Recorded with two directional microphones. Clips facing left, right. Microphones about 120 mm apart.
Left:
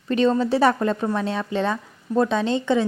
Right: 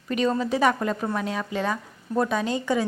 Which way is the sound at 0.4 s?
30° left (ahead or behind).